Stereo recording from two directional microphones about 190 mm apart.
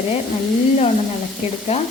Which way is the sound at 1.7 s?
35° left (ahead or behind).